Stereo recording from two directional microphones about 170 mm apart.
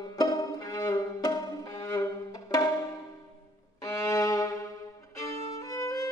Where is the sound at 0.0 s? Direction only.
25° left (ahead or behind).